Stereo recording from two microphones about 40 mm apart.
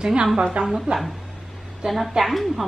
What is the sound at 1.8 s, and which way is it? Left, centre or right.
Speech, centre.